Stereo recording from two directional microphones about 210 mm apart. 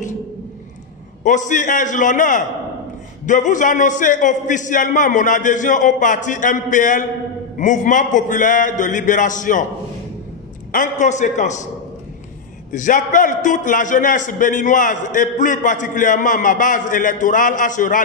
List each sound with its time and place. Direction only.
1.2 s a man's voice: 35° left (ahead or behind)
10.7 s a man's voice: 35° left (ahead or behind)
12.7 s a man's voice: 40° left (ahead or behind)